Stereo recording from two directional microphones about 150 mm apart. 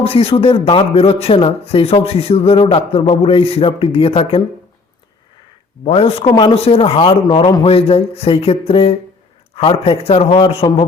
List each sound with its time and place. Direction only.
0.0 s a man's voice: 40° left (ahead or behind)
5.8 s a man's voice: 40° left (ahead or behind)